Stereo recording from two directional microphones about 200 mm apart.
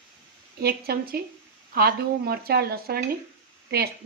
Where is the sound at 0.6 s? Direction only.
50° right (ahead or behind).